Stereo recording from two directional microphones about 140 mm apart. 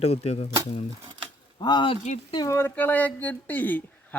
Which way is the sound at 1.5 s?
35° left (ahead or behind).